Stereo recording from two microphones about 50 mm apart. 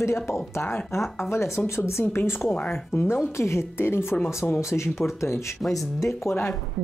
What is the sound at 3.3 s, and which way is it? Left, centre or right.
Speech, left.